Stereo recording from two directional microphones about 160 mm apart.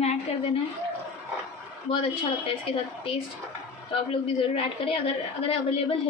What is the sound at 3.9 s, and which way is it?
A woman's voice, 35° left (ahead or behind).